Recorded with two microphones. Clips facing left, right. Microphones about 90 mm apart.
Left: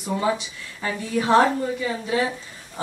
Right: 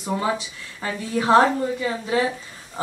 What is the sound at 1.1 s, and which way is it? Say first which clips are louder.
Speech: right 1 dB; 35° right (ahead or behind).